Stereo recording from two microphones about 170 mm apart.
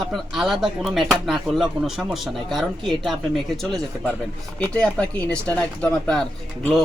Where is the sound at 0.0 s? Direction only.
Centre (ahead or behind).